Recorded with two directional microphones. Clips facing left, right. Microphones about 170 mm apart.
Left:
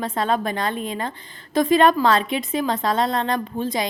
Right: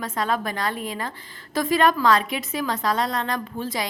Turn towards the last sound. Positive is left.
turn(degrees=20)  # may be behind; listen again after turning